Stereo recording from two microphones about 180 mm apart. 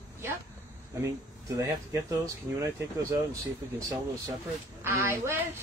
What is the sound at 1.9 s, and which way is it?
Speech, 15° right (ahead or behind).